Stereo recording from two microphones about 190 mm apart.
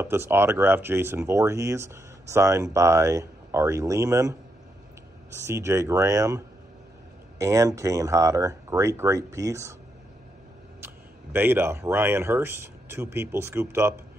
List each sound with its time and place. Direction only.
0.0 s speech: 15° right (ahead or behind)
5.5 s speech: 15° right (ahead or behind)
11.3 s speech: 10° right (ahead or behind)